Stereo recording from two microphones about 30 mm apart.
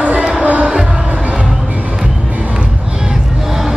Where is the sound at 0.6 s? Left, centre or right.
Right.